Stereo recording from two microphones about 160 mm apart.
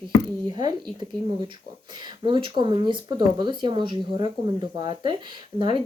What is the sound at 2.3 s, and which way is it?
Speech, 30° right (ahead or behind).